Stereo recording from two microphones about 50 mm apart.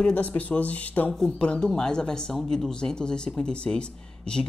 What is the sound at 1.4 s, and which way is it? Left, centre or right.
A woman's voice, centre.